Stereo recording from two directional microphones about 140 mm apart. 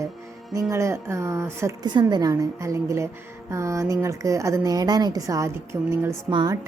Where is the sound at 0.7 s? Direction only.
20° right (ahead or behind).